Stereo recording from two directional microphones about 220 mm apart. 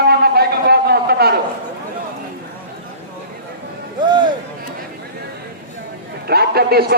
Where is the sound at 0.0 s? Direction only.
45° right (ahead or behind).